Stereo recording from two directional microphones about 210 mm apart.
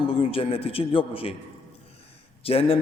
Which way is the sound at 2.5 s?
25° left (ahead or behind).